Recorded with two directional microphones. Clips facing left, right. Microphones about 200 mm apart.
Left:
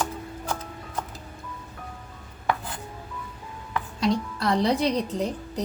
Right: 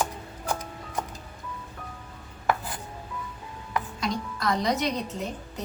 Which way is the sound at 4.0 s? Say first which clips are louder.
Left 6 dB; 30° left (ahead or behind).